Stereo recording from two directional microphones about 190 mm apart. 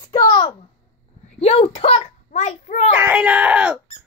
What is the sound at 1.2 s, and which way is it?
A child's voice, 35° left (ahead or behind).